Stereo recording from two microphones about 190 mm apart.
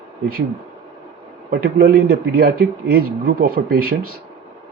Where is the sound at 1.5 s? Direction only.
50° right (ahead or behind).